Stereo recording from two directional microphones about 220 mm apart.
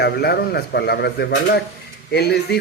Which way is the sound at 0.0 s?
45° left (ahead or behind).